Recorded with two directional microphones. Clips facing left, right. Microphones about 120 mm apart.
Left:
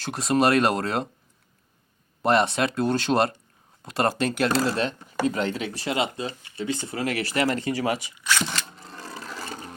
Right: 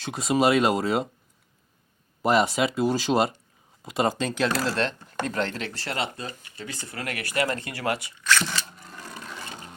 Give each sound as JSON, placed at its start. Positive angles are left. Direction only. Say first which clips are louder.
{"t": 0.0, "sound": "speech", "louder": "left 1 dB", "side_deg": 0}
{"t": 2.2, "sound": "speech", "louder": "even", "side_deg": -5}
{"t": 7.5, "sound": "speech", "louder": "left 3 dB", "side_deg": 20}
{"t": 8.7, "sound": "a sound", "louder": "left 2 dB", "side_deg": 30}